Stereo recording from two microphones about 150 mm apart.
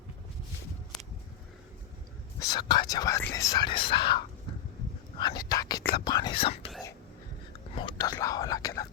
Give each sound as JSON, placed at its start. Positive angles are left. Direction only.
{"t": 2.4, "sound": "speech", "side_deg": 30}
{"t": 7.8, "sound": "speech", "side_deg": 30}